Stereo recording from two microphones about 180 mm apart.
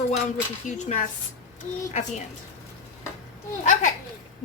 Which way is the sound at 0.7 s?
45° left (ahead or behind).